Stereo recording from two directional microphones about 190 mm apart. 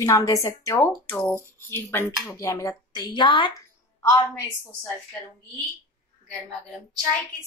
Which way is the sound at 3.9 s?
15° left (ahead or behind).